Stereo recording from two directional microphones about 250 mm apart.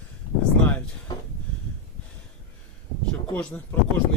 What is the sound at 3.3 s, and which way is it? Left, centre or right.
Speech, centre.